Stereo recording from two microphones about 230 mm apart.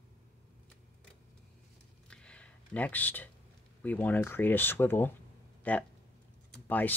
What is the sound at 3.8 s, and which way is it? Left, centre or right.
Speech, centre.